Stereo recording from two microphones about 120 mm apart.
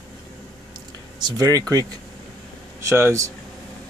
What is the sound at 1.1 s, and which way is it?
Speech, 35° right (ahead or behind).